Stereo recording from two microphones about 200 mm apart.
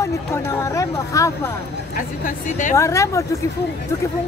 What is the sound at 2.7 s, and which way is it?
Speech, 15° left (ahead or behind).